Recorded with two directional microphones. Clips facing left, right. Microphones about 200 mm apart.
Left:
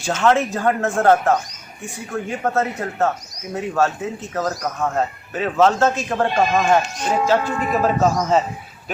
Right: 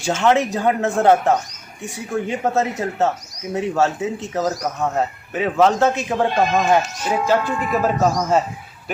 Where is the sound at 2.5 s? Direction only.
15° right (ahead or behind).